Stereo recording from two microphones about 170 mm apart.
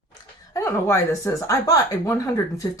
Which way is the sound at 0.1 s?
20° left (ahead or behind).